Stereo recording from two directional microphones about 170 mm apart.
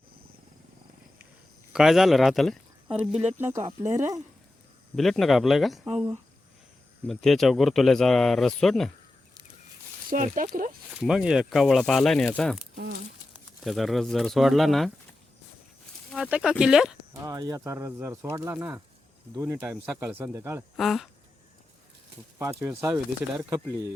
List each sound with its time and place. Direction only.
1.7 s speech: centre (ahead or behind)
4.9 s speech: centre (ahead or behind)
10.1 s speech: 50° right (ahead or behind)
10.9 s speech: 5° right (ahead or behind)
13.7 s speech: centre (ahead or behind)
16.1 s speech: 5° right (ahead or behind)
17.2 s speech: 20° right (ahead or behind)
20.7 s speech: centre (ahead or behind)
22.6 s speech: 15° right (ahead or behind)